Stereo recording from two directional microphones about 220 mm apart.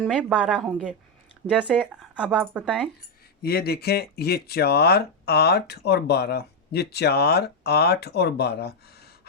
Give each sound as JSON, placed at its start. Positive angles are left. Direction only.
{"t": 0.0, "sound": "speech", "side_deg": -5}
{"t": 3.4, "sound": "speech", "side_deg": 45}